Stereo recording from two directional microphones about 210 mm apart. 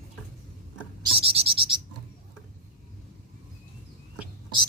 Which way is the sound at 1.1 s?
25° right (ahead or behind).